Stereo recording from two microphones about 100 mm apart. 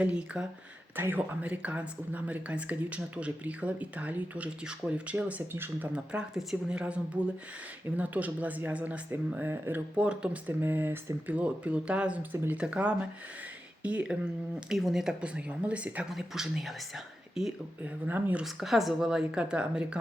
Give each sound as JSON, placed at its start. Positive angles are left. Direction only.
{"t": 0.0, "sound": "speech", "side_deg": -10}
{"t": 5.9, "sound": "speech", "side_deg": -10}
{"t": 17.8, "sound": "speech", "side_deg": -15}
{"t": 18.4, "sound": "speech", "side_deg": 0}